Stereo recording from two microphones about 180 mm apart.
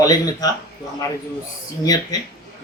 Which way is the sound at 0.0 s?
20° left (ahead or behind).